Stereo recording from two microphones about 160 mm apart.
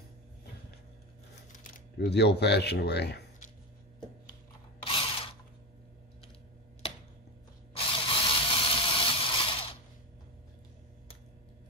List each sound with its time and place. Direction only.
2.0 s speech: 90° left
4.8 s mechanisms: 35° left (ahead or behind)
7.7 s a sound: 35° left (ahead or behind)